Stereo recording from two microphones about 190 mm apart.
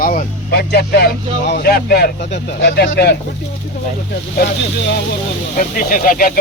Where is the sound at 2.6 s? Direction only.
70° left (ahead or behind).